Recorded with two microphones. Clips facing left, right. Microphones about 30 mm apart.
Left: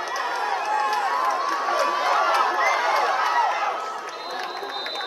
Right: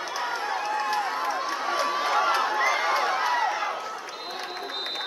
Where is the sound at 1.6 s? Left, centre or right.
Centre.